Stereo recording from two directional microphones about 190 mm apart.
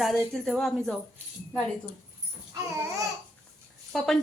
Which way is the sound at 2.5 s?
15° right (ahead or behind).